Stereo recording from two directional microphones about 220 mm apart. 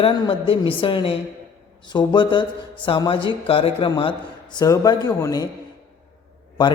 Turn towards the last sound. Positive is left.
turn(degrees=20)  # may be behind; listen again after turning